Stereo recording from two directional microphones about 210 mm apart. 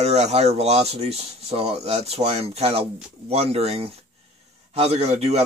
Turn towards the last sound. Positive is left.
turn(degrees=-30)  # may be behind; listen again after turning